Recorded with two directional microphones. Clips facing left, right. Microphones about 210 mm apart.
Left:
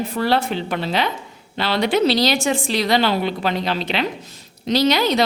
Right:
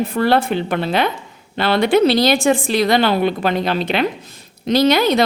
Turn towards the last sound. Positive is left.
turn(degrees=-55)  # may be behind; listen again after turning